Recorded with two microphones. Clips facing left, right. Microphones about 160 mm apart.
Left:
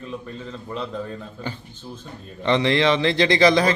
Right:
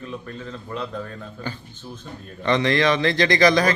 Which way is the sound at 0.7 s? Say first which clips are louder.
Left 1 dB; 15° left (ahead or behind).